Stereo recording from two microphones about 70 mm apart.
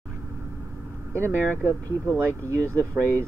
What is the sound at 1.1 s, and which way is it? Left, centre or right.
Speech, right.